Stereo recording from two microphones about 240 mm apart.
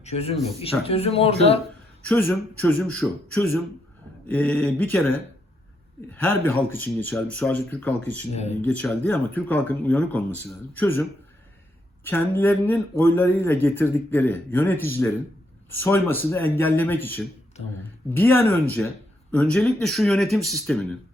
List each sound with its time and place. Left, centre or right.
0.0 s speech: left
2.0 s speech: centre
12.0 s speech: centre